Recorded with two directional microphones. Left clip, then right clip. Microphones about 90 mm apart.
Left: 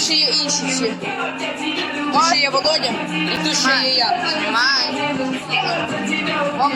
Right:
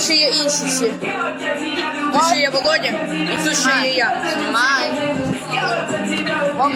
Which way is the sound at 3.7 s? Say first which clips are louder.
Even; 40° right (ahead or behind).